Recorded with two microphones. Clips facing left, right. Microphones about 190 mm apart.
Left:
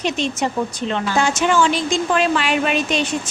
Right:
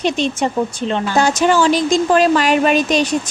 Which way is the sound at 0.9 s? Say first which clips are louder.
Right 3 dB; 35° right (ahead or behind).